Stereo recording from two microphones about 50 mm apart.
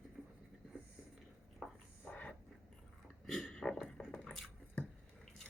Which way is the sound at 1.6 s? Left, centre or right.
Centre.